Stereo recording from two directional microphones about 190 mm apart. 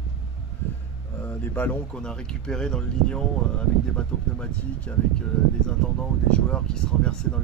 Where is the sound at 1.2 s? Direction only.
10° left (ahead or behind).